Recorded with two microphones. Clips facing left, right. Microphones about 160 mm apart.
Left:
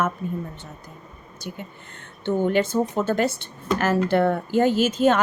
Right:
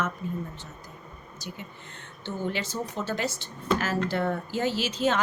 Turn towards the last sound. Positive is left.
turn(degrees=50)  # may be behind; listen again after turning